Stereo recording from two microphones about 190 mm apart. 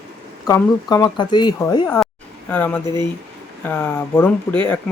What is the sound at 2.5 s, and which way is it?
Speech, 10° left (ahead or behind).